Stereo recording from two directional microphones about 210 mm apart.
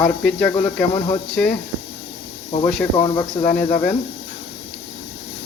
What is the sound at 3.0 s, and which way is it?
Speech, 15° left (ahead or behind).